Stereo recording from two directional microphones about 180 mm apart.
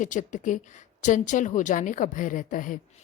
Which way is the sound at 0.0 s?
45° left (ahead or behind).